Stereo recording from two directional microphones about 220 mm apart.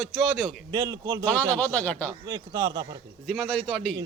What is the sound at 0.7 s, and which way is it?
Speech, 20° right (ahead or behind).